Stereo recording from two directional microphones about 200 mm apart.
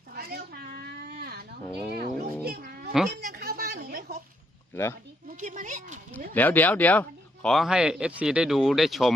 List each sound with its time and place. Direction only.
0.1 s cat: 50° right (ahead or behind)
2.0 s children playing: 50° right (ahead or behind)
3.1 s a sound: 50° right (ahead or behind)
4.7 s speech: 10° left (ahead or behind)
5.3 s speech: 40° right (ahead or behind)
6.3 s speech: 10° left (ahead or behind)